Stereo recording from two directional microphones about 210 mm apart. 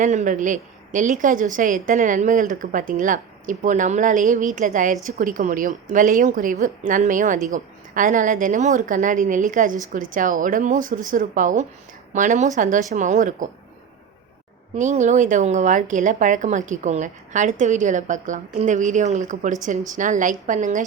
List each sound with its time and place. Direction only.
0.0 s speech: 35° right (ahead or behind)
14.8 s speech: 35° right (ahead or behind)